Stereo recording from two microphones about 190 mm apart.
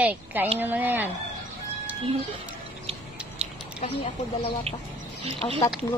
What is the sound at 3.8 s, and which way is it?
Speech, 35° left (ahead or behind).